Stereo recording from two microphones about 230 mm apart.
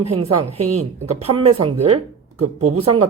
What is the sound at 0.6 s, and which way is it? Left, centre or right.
Speech, right.